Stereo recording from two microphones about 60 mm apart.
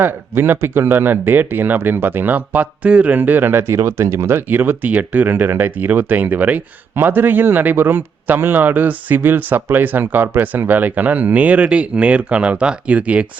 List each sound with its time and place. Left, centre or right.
0.0 s speech: right